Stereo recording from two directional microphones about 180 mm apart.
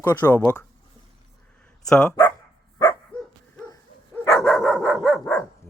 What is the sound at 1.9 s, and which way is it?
Speech, 5° left (ahead or behind).